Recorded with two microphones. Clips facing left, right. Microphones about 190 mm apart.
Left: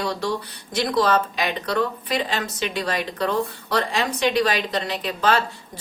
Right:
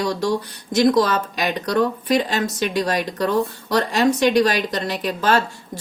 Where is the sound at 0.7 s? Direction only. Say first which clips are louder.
Right 4 dB; 45° right (ahead or behind).